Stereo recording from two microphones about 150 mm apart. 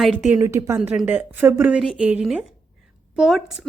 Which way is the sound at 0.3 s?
20° right (ahead or behind).